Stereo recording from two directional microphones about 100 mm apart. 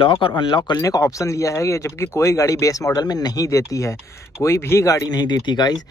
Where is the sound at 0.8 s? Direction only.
35° left (ahead or behind).